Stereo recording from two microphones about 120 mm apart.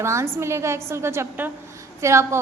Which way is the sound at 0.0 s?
25° right (ahead or behind).